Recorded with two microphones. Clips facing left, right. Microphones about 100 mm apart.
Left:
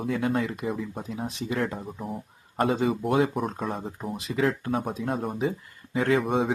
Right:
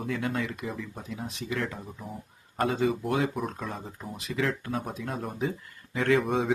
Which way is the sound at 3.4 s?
45° left (ahead or behind).